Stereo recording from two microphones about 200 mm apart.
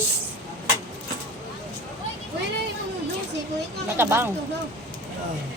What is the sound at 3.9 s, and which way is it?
Speech, 10° right (ahead or behind).